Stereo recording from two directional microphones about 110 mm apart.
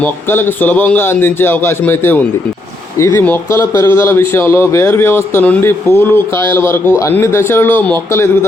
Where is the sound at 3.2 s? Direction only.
20° left (ahead or behind).